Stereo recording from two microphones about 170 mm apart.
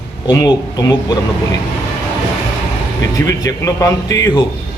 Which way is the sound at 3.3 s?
20° left (ahead or behind).